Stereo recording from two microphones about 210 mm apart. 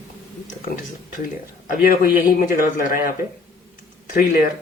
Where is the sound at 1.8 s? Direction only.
45° left (ahead or behind).